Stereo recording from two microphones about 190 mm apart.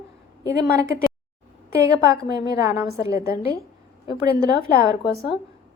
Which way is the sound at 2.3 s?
15° right (ahead or behind).